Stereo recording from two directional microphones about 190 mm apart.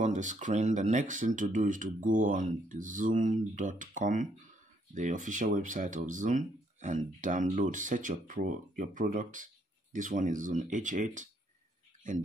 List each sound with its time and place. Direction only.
0.0 s speech: 40° right (ahead or behind)